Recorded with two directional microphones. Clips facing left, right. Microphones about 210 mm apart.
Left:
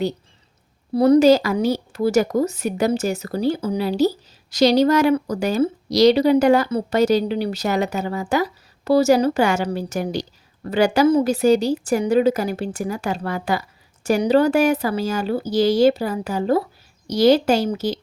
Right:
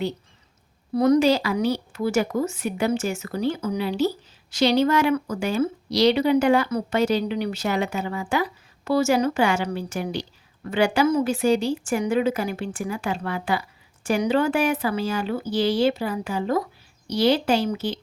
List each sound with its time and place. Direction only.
0.9 s speech: 30° left (ahead or behind)